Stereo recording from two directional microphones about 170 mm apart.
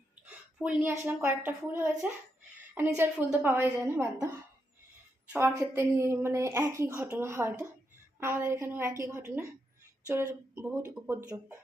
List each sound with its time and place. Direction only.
0.6 s speech: 10° right (ahead or behind)
5.3 s speech: 15° right (ahead or behind)
10.5 s speech: 10° right (ahead or behind)